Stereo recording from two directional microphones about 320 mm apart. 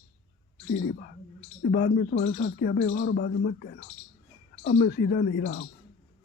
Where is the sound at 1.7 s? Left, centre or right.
Left.